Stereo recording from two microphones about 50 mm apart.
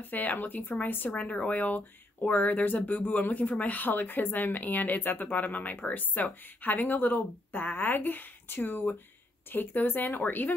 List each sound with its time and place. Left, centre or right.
0.0 s speech: left
1.1 s speech: left
1.5 s speech: left